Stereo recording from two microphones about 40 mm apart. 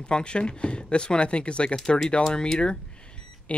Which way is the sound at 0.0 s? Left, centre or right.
Left.